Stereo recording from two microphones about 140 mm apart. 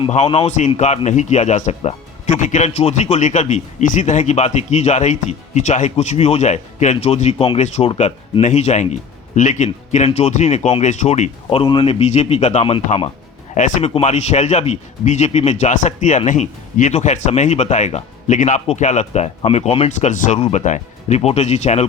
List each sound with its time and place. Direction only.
0.1 s a man's voice: 45° left (ahead or behind)
11.6 s speech: 40° left (ahead or behind)
13.5 s speech: 55° left (ahead or behind)